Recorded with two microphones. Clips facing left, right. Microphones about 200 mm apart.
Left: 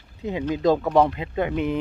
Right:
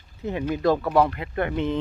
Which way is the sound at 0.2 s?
15° left (ahead or behind).